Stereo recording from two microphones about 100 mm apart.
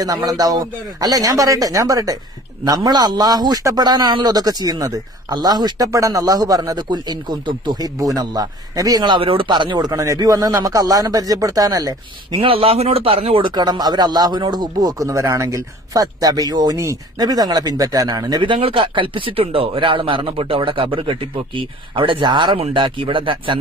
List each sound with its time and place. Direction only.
0.0 s a man's voice: 40° right (ahead or behind)
8.0 s a man's voice: 35° right (ahead or behind)
9.0 s a man's voice: 55° right (ahead or behind); by 12.4 s 40° right (ahead or behind)
12.4 s speech: 65° right (ahead or behind)
13.6 s a man's voice: 45° right (ahead or behind)
18.4 s speech: 60° right (ahead or behind)